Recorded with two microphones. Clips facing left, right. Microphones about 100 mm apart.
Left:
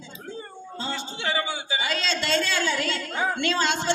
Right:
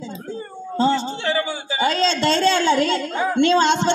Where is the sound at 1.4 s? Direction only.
35° right (ahead or behind).